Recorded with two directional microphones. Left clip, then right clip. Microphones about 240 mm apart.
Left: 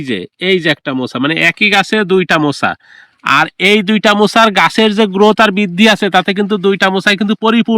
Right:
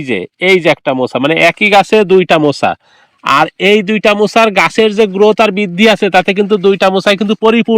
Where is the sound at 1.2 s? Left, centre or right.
Centre.